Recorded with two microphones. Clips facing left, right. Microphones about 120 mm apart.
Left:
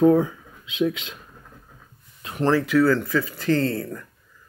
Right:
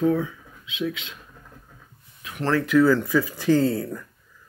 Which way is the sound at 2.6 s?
Centre (ahead or behind).